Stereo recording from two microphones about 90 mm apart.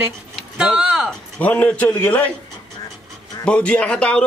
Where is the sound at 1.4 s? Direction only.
15° left (ahead or behind).